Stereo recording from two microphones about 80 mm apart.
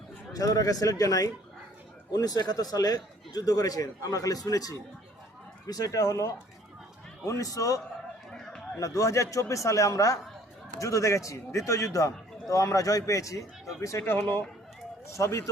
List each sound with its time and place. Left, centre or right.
0.3 s a man's voice: left
8.8 s a man's voice: left
14.0 s a man's voice: left
15.1 s a man's voice: left